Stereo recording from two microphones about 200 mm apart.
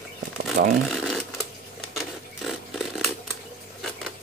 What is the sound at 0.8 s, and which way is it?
Shuffling cards, centre (ahead or behind).